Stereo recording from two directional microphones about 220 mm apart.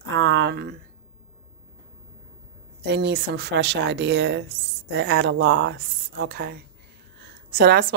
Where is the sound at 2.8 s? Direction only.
50° right (ahead or behind).